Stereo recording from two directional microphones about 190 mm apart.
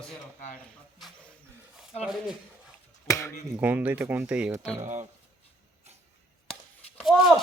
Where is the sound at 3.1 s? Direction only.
15° left (ahead or behind).